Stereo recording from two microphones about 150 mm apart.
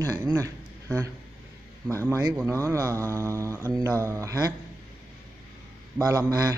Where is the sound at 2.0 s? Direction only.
20° right (ahead or behind).